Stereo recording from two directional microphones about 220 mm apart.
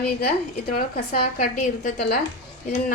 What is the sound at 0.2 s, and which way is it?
A woman's voice, 45° left (ahead or behind).